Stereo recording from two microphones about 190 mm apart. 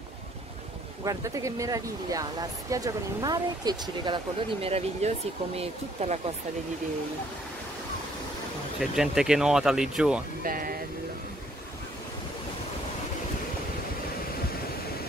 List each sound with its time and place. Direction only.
1.0 s speech: 15° right (ahead or behind); by 6.3 s 30° right (ahead or behind)
8.7 s speech: 5° right (ahead or behind)
10.4 s vehicle: 50° right (ahead or behind)